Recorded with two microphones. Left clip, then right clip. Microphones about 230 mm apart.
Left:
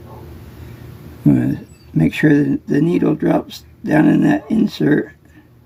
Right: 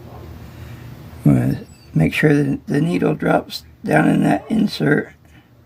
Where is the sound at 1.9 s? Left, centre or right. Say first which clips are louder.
Left 2 dB; right.